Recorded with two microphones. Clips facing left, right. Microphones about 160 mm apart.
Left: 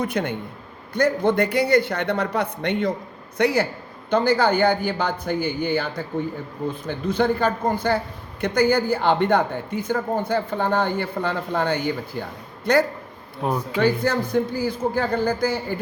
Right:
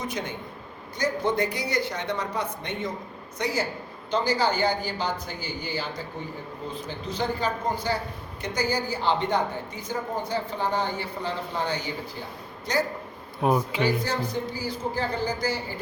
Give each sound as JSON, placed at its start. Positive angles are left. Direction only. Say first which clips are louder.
{"t": 0.0, "sound": "speech", "louder": "left 7 dB", "side_deg": 60}